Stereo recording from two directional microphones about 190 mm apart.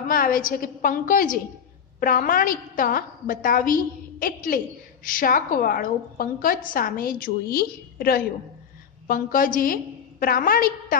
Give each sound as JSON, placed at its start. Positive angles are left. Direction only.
{"t": 0.1, "sound": "a woman's voice", "side_deg": 45}